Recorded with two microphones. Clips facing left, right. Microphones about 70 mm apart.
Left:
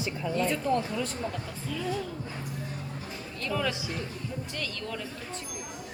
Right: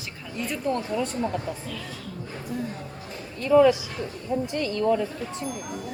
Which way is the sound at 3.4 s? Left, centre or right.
Centre.